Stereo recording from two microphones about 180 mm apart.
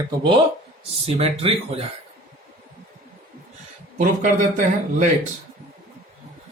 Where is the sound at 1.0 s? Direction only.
35° right (ahead or behind).